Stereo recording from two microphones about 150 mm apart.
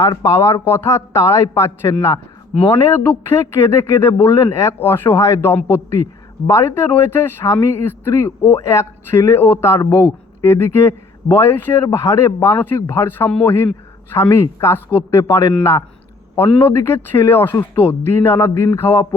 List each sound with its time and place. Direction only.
0.0 s a man's voice: 20° left (ahead or behind)
16.6 s a man's voice: 15° left (ahead or behind)